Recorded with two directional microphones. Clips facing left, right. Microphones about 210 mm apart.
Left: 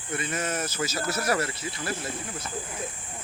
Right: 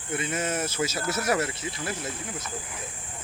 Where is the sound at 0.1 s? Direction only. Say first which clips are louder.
Right 1 dB; 25° right (ahead or behind).